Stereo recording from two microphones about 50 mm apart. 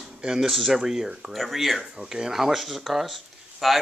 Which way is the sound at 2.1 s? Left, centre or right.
Centre.